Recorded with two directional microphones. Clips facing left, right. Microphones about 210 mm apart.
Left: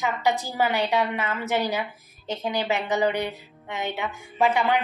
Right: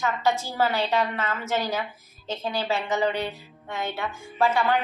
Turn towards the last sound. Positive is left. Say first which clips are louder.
# left 1 dB
turn(degrees=15)  # may be behind; listen again after turning